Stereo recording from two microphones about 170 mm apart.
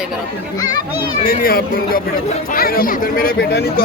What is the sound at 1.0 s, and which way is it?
Speech, 60° left (ahead or behind).